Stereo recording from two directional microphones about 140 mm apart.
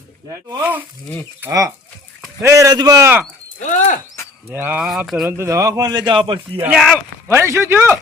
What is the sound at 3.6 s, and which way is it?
Speech, 60° left (ahead or behind).